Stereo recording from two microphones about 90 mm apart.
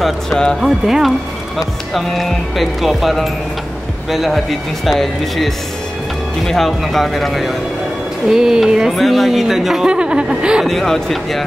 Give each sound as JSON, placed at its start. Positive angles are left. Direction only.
{"t": 0.0, "sound": "speech", "side_deg": 5}
{"t": 0.6, "sound": "speech", "side_deg": -5}
{"t": 10.7, "sound": "speech", "side_deg": 5}